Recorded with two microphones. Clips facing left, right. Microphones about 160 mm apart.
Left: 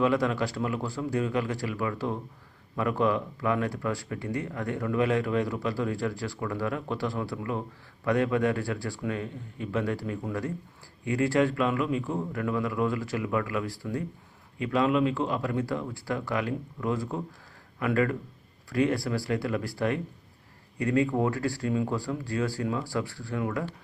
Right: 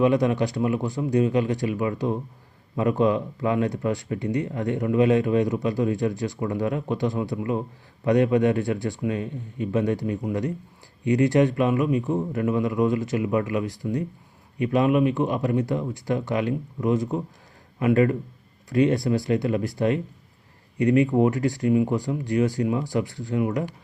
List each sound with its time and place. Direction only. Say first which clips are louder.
0.0 s speech: right 5 dB; 20° right (ahead or behind)